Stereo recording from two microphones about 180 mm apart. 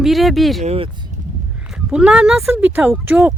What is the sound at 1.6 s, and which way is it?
Speech, 5° right (ahead or behind).